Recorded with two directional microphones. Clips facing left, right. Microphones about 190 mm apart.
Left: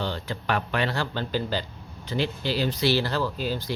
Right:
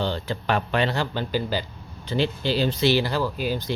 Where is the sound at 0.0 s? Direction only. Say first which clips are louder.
Right 4 dB; 30° right (ahead or behind); by 1.6 s 10° right (ahead or behind).